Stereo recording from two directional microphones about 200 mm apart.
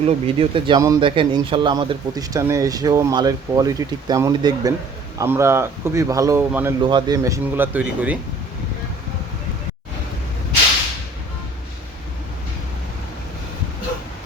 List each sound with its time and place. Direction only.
0.0 s a man's voice: 25° right (ahead or behind); by 6.7 s 10° right (ahead or behind)
6.8 s speech: 20° right (ahead or behind)